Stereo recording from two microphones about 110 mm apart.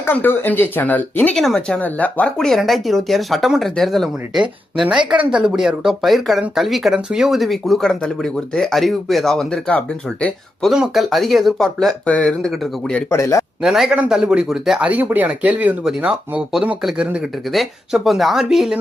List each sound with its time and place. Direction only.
0.0 s speech: 20° left (ahead or behind)
1.4 s speech: 5° left (ahead or behind)
1.8 s speech: 15° left (ahead or behind)
10.6 s speech: centre (ahead or behind)
13.1 s speech: 25° left (ahead or behind)
13.6 s speech: 5° right (ahead or behind)